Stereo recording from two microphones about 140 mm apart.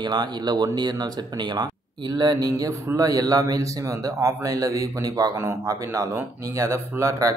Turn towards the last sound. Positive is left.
turn(degrees=-20)  # may be behind; listen again after turning